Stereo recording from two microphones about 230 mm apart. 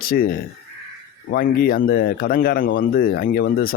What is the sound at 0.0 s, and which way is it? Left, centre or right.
A man's voice, left.